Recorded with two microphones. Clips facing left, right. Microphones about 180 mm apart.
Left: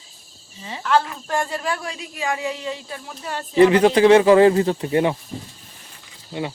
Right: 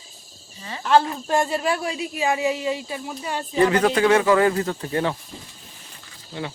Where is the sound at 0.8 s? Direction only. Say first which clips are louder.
Right 2 dB; 25° right (ahead or behind); by 3.4 s 5° right (ahead or behind).